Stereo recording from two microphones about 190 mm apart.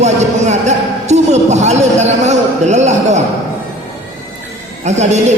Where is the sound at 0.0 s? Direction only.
35° right (ahead or behind).